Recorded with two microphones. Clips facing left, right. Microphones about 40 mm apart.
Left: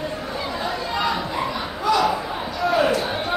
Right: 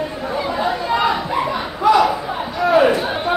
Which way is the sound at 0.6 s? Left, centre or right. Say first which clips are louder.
Right 7 dB; right.